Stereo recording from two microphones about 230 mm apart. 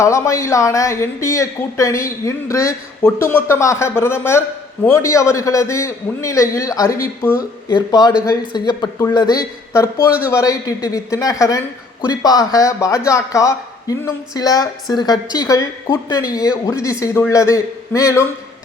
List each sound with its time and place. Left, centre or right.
0.0 s speech: centre